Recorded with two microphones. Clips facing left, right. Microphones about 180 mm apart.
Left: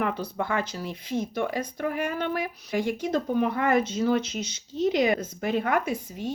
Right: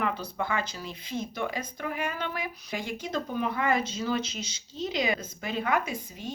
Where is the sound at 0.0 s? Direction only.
60° left (ahead or behind).